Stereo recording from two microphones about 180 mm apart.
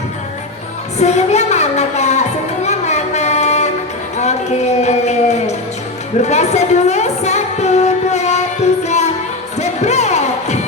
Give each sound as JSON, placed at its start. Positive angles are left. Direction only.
{"t": 0.9, "sound": "music", "side_deg": 40}
{"t": 2.6, "sound": "a sound", "side_deg": 40}
{"t": 4.2, "sound": "music", "side_deg": 40}